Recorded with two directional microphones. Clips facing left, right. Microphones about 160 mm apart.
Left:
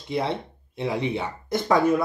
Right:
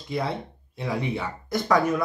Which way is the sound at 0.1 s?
25° left (ahead or behind).